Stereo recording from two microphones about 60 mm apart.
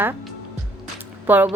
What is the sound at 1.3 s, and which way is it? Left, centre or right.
Speech, right.